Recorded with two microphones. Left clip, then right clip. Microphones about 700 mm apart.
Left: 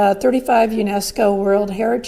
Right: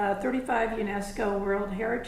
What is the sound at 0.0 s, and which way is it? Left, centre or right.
A woman's voice, left.